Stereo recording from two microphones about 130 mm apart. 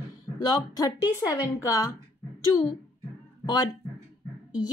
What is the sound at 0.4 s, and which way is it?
Speech, 30° left (ahead or behind).